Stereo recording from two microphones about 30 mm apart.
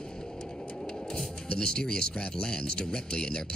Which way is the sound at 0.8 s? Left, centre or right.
Centre.